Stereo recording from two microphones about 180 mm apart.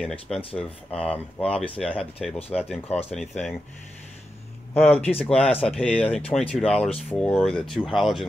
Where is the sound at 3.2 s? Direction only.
Centre (ahead or behind).